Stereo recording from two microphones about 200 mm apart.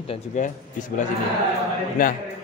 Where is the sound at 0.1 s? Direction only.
40° left (ahead or behind).